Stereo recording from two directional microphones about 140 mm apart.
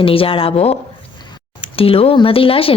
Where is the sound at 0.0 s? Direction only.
40° left (ahead or behind).